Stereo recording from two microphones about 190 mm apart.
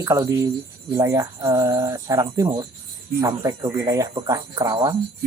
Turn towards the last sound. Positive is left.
turn(degrees=-20)  # may be behind; listen again after turning